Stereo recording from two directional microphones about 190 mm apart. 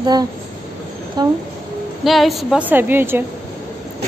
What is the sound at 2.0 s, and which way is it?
A woman's voice, centre (ahead or behind).